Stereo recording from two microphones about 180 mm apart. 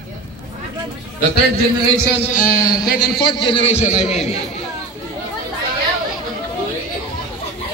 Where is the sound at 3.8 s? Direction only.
40° left (ahead or behind).